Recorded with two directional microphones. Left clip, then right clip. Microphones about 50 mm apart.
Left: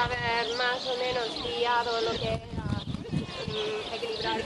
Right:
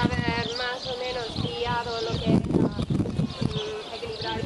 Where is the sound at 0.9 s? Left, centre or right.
Right.